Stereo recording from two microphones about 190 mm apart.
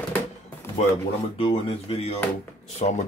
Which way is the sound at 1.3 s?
30° left (ahead or behind).